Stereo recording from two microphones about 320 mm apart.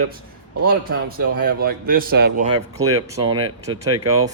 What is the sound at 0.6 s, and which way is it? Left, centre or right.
A man's voice, right.